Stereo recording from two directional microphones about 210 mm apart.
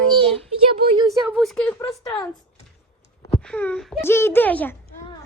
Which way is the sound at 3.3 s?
5° left (ahead or behind).